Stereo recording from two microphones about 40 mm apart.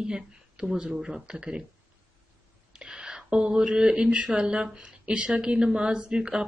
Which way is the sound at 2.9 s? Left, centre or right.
Right.